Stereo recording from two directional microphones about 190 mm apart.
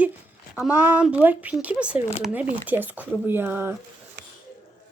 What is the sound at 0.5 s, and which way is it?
Speech, 10° right (ahead or behind).